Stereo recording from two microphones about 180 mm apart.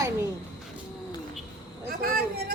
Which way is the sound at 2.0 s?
60° right (ahead or behind).